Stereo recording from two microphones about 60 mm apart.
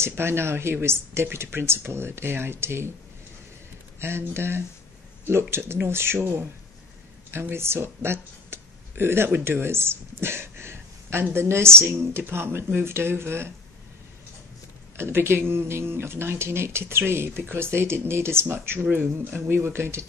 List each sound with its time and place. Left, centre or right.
0.0 s speech: right
4.0 s speech: right
15.0 s speech: right